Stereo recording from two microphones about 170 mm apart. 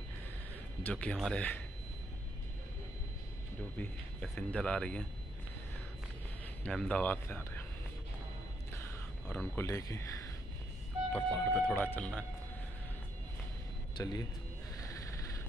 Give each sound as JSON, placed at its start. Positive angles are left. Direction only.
{"t": 0.8, "sound": "a man's voice", "side_deg": 5}
{"t": 3.7, "sound": "a man's voice", "side_deg": 10}
{"t": 6.6, "sound": "a man's voice", "side_deg": 5}
{"t": 9.6, "sound": "speech", "side_deg": 20}
{"t": 11.1, "sound": "a man's voice", "side_deg": 5}
{"t": 13.9, "sound": "a man's voice", "side_deg": 25}